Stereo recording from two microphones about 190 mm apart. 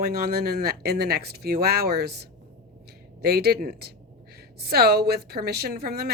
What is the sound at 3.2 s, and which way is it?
A woman's voice, 55° right (ahead or behind).